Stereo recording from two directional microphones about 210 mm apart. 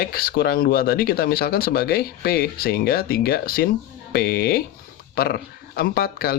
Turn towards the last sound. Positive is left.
turn(degrees=45)  # may be behind; listen again after turning